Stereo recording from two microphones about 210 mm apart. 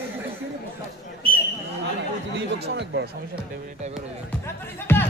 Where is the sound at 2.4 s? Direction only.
55° right (ahead or behind).